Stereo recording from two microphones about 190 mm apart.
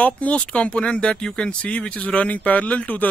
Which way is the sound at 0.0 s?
5° left (ahead or behind).